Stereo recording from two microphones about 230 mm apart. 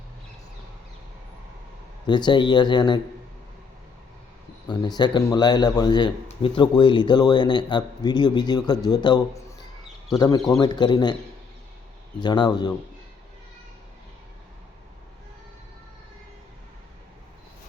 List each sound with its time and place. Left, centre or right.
2.0 s speech: centre
4.7 s speech: centre
12.2 s speech: centre